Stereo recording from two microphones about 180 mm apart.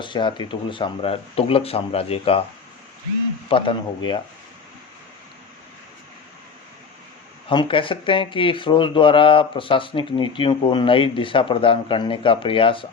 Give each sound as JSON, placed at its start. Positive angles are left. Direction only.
{"t": 0.0, "sound": "speech", "side_deg": 25}
{"t": 3.5, "sound": "speech", "side_deg": 25}
{"t": 7.5, "sound": "speech", "side_deg": 25}